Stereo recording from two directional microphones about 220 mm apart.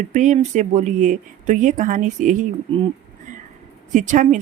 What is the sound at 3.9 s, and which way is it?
Speech, 35° right (ahead or behind).